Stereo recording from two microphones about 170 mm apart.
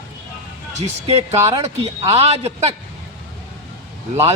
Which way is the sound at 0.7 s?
40° right (ahead or behind).